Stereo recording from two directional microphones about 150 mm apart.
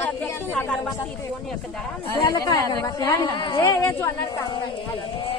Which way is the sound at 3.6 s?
15° left (ahead or behind).